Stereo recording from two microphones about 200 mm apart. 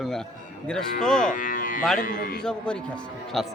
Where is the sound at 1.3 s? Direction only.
40° left (ahead or behind).